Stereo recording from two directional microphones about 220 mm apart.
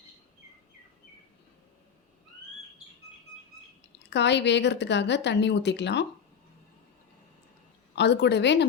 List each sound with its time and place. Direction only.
4.1 s speech: 50° left (ahead or behind)
7.9 s speech: 50° left (ahead or behind)